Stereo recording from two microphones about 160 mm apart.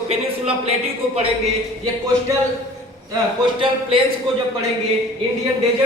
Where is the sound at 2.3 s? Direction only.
20° right (ahead or behind).